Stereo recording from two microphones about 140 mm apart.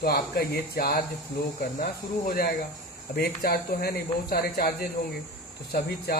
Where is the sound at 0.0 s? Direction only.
90° left.